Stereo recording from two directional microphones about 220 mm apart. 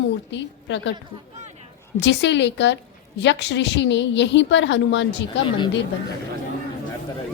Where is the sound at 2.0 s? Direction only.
55° left (ahead or behind).